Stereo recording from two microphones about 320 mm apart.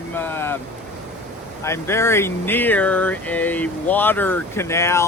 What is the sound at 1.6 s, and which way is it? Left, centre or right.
Speech, centre.